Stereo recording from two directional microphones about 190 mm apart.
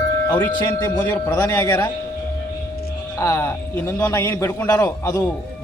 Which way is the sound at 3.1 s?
15° left (ahead or behind).